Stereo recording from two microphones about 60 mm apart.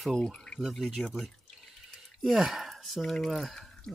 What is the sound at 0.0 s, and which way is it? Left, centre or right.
Speech, centre.